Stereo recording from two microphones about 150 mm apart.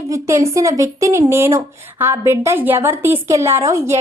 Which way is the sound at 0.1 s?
20° right (ahead or behind).